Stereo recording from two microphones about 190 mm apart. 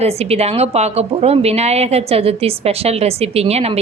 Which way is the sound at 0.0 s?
35° right (ahead or behind).